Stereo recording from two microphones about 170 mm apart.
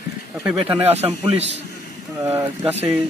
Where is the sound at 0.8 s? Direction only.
10° right (ahead or behind).